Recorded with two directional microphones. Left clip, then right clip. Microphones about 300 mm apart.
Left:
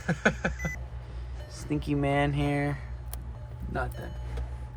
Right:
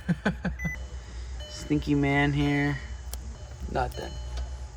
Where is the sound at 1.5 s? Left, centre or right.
Centre.